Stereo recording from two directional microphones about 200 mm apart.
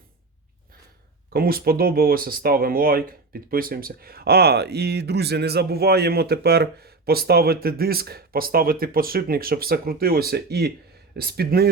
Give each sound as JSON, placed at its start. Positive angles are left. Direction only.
{"t": 1.3, "sound": "speech", "side_deg": -45}